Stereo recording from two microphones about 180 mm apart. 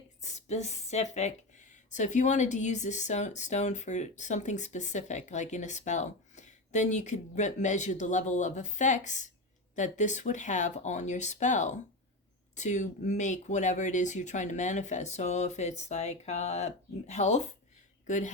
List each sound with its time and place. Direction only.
0.2 s a woman's voice: 40° left (ahead or behind)